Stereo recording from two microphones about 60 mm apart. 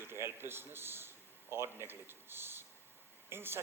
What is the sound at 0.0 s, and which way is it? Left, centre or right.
A man's voice, right.